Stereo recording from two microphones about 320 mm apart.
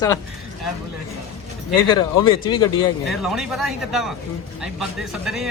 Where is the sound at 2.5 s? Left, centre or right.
Left.